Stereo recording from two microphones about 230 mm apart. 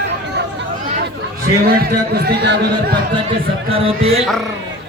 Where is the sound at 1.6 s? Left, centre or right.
Right.